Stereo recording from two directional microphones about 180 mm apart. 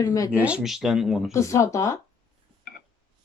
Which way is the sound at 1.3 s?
15° left (ahead or behind).